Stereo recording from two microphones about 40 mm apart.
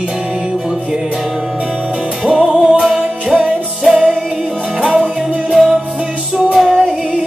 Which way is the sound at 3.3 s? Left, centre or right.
Right.